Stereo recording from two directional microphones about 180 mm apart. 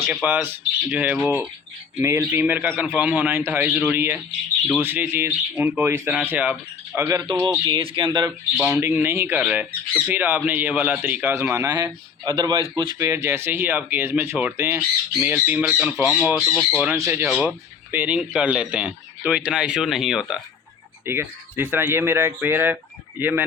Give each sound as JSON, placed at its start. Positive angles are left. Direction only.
{"t": 0.0, "sound": "speech", "side_deg": -10}
{"t": 8.3, "sound": "a man's voice", "side_deg": -5}